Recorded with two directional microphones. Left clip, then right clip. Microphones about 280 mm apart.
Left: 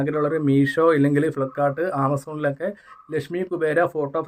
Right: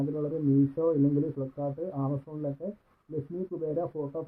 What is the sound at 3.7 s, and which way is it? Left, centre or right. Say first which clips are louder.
Speech: left 13 dB; left.